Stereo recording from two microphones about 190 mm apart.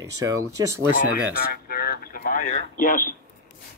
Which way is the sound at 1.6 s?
55° left (ahead or behind).